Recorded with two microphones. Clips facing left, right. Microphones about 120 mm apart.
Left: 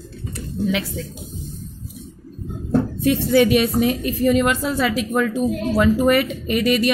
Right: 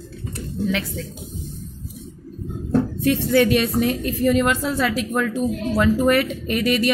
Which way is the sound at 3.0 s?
10° left (ahead or behind).